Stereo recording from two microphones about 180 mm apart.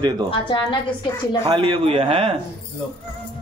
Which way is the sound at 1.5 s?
30° right (ahead or behind).